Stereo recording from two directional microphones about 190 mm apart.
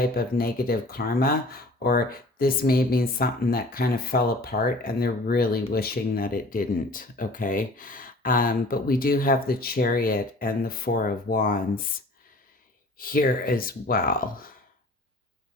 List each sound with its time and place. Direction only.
0.0 s speech: 50° left (ahead or behind)
13.0 s speech: 50° left (ahead or behind)